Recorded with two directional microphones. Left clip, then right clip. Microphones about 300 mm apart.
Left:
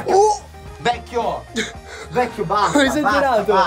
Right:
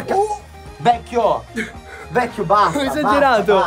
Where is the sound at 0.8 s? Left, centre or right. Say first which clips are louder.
Right 5 dB; right.